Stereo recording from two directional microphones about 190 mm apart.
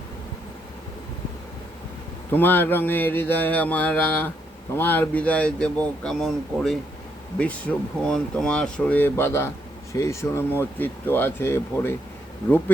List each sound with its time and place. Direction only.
2.3 s speech: 10° left (ahead or behind)